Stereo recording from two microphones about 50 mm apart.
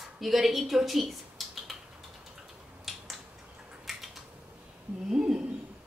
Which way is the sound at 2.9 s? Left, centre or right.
Centre.